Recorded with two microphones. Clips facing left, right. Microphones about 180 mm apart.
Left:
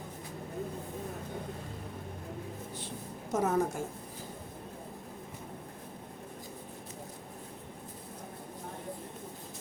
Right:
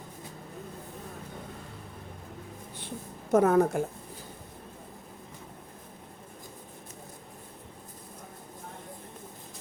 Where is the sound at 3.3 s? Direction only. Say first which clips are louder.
Right 7 dB; 60° right (ahead or behind).